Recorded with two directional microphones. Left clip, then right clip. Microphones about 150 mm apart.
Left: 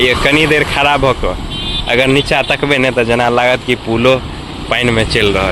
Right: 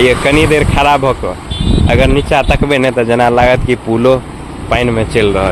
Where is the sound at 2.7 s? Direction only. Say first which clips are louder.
Right 1 dB; 15° right (ahead or behind).